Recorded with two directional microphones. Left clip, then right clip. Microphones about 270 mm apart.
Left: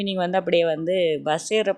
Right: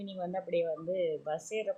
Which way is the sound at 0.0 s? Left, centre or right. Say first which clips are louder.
Left 14 dB; left.